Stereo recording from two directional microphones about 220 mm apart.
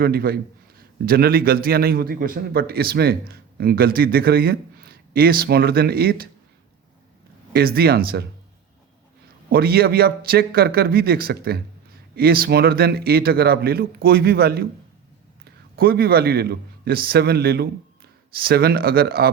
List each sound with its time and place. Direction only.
0.0 s a man's voice: 45° right (ahead or behind)
7.5 s a man's voice: 45° right (ahead or behind)
9.5 s a man's voice: 45° right (ahead or behind)
15.7 s a man's voice: 45° right (ahead or behind)